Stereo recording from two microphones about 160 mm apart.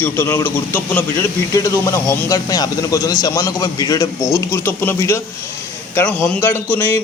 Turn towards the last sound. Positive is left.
turn(degrees=10)  # may be behind; listen again after turning